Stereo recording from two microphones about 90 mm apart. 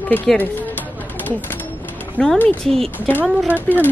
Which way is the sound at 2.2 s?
15° left (ahead or behind).